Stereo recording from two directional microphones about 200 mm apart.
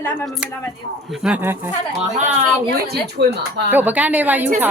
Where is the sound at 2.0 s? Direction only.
35° right (ahead or behind).